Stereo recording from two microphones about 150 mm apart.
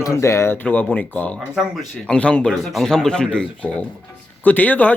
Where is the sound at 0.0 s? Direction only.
20° left (ahead or behind).